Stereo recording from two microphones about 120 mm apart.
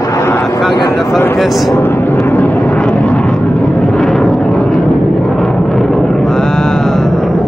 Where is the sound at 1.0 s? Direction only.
20° left (ahead or behind).